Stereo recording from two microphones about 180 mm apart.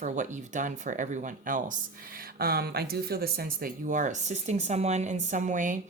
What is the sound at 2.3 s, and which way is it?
Speech, 55° right (ahead or behind).